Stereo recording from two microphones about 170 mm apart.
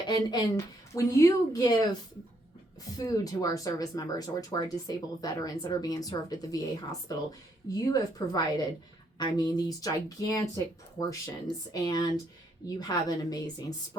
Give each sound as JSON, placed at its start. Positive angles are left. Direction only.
{"t": 0.1, "sound": "speech", "side_deg": 25}
{"t": 3.0, "sound": "speech", "side_deg": 20}